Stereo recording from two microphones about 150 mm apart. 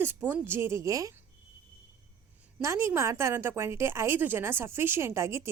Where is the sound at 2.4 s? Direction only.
20° right (ahead or behind).